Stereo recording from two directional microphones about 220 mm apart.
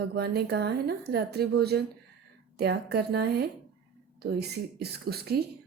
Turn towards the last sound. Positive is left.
turn(degrees=-45)  # may be behind; listen again after turning